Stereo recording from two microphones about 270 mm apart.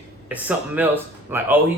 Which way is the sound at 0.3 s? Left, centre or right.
Centre.